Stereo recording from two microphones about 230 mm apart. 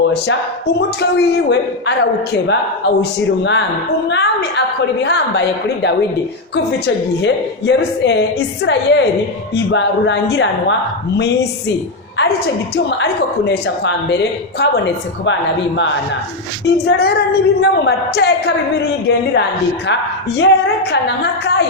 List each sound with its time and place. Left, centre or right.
0.0 s a woman's voice: left
12.7 s a woman's voice: left